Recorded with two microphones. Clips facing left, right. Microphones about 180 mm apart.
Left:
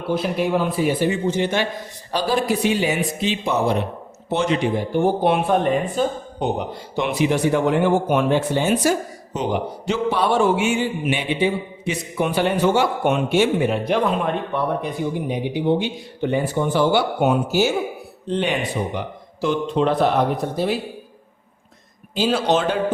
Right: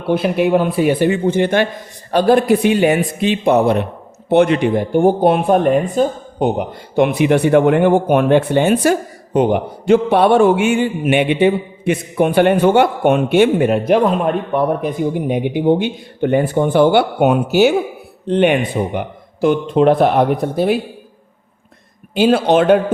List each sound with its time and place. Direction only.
0.1 s speech: 65° right (ahead or behind); by 5.7 s 45° right (ahead or behind)
6.9 s speech: 55° right (ahead or behind)
22.1 s speech: 60° right (ahead or behind)